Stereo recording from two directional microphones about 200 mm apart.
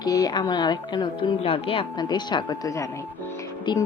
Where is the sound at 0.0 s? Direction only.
20° left (ahead or behind).